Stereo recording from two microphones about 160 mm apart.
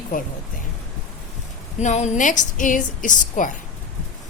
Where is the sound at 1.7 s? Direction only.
45° left (ahead or behind).